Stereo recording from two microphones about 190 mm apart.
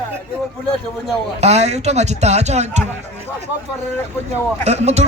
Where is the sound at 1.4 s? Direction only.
35° right (ahead or behind).